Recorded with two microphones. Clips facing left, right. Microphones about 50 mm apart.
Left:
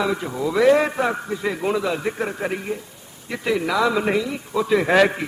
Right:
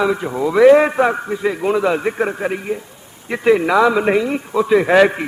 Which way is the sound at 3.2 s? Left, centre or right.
Right.